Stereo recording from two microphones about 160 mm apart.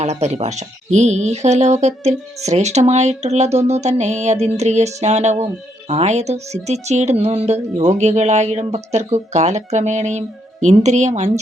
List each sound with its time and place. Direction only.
0.0 s speech: 45° right (ahead or behind)